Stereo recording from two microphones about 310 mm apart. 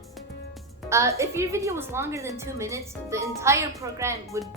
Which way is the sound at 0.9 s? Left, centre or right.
Centre.